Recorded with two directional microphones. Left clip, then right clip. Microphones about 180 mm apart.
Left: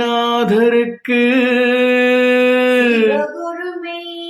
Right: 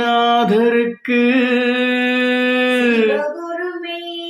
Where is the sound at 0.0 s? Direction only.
10° left (ahead or behind).